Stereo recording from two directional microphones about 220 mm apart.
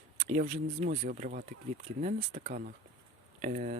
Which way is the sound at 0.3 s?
30° right (ahead or behind).